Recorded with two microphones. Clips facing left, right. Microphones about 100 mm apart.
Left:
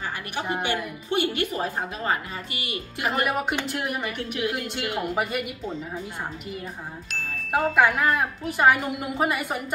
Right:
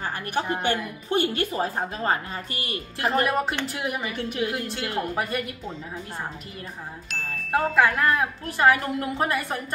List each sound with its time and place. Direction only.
0.5 s speech: 15° left (ahead or behind)
1.1 s a woman's voice: 35° right (ahead or behind)
3.0 s speech: 5° left (ahead or behind)
7.1 s speech: centre (ahead or behind)